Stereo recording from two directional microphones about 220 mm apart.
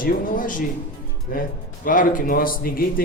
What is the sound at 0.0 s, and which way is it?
Speech, 40° left (ahead or behind).